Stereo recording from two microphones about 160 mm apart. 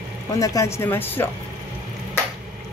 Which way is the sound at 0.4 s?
20° left (ahead or behind).